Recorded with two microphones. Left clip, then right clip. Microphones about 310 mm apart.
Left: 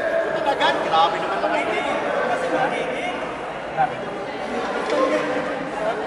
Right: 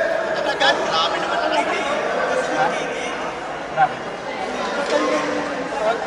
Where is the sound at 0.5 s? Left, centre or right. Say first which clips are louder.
Right 2 dB; centre.